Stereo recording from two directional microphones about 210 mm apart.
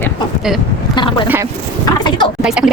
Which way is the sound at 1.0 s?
20° left (ahead or behind).